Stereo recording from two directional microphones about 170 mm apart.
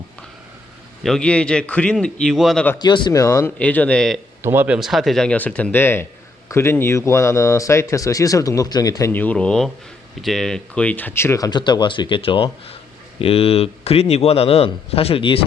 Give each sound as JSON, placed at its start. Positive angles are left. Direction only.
{"t": 1.0, "sound": "speech", "side_deg": 5}
{"t": 2.7, "sound": "speech", "side_deg": 25}
{"t": 4.4, "sound": "a man's voice", "side_deg": -10}